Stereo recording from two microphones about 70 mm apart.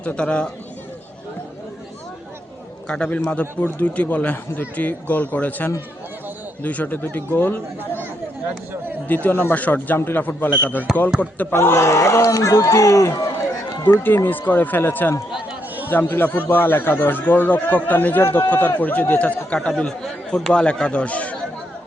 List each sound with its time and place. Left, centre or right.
0.0 s speech: centre
2.8 s a man's voice: centre
9.0 s a man's voice: left
10.9 s speech: centre
11.5 s speech: left
14.3 s a man's voice: left
19.6 s speech: centre